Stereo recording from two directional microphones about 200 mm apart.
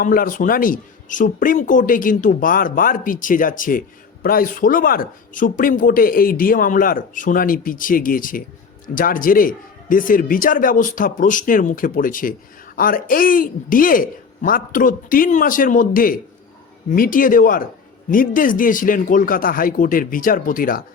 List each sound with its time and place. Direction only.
0.0 s speech: 45° left (ahead or behind)